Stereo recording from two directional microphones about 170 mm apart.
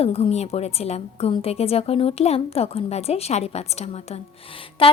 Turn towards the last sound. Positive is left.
turn(degrees=30)  # may be behind; listen again after turning